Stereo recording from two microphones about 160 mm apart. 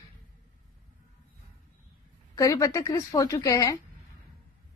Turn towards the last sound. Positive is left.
turn(degrees=20)  # may be behind; listen again after turning